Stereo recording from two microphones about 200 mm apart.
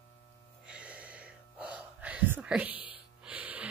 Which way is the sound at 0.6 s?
5° right (ahead or behind).